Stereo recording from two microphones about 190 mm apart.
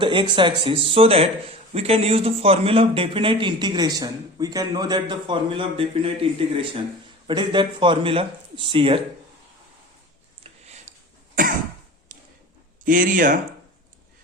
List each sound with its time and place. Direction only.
0.0 s speech: 25° right (ahead or behind)
7.3 s speech: 25° right (ahead or behind)
10.4 s tick-tock: 35° right (ahead or behind)
12.8 s speech: 45° right (ahead or behind)